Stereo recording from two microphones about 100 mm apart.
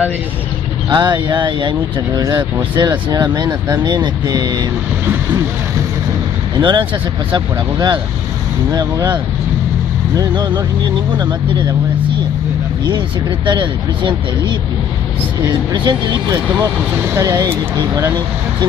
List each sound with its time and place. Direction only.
0.8 s speech: 50° right (ahead or behind)
6.6 s speech: 50° right (ahead or behind)
11.1 s speech: 45° right (ahead or behind)
13.5 s speech: 50° right (ahead or behind)
15.7 s speech: 50° right (ahead or behind)
17.1 s speech: 30° right (ahead or behind)